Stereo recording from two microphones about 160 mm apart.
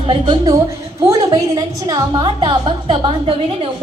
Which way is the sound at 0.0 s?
30° right (ahead or behind).